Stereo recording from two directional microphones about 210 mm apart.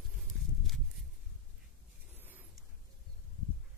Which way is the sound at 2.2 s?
10° right (ahead or behind).